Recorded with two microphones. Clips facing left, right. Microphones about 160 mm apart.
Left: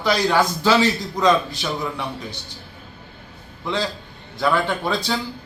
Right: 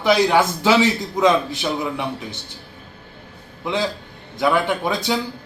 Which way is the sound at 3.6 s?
20° right (ahead or behind).